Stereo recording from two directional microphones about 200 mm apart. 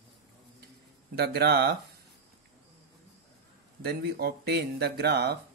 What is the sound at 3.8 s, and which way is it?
Speech, 50° right (ahead or behind).